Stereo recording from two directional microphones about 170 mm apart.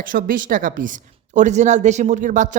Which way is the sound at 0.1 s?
55° right (ahead or behind).